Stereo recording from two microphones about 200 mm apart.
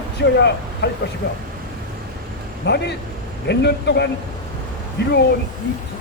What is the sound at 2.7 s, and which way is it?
Speech, 55° left (ahead or behind).